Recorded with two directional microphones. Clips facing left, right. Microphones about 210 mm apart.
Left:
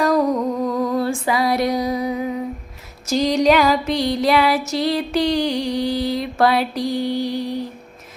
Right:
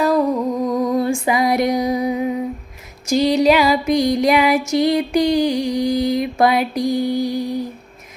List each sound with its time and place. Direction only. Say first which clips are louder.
0.0 s female singing: right 1 dB; centre (ahead or behind); by 2.2 s 20° right (ahead or behind)
3.1 s music: right 2 dB; 10° right (ahead or behind)